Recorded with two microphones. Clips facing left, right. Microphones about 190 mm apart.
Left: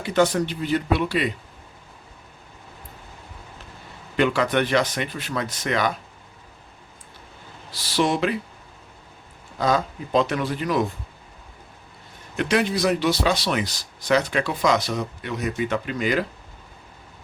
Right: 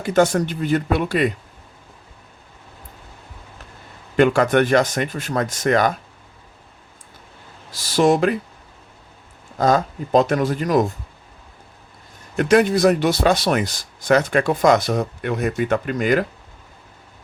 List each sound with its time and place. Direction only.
0.0 s speech: 45° right (ahead or behind)
4.2 s speech: 50° right (ahead or behind)
7.7 s speech: 45° right (ahead or behind)
9.6 s speech: 45° right (ahead or behind)
12.4 s speech: 45° right (ahead or behind)